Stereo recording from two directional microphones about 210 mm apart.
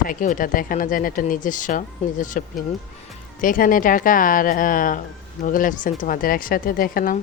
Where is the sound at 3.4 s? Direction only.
40° left (ahead or behind).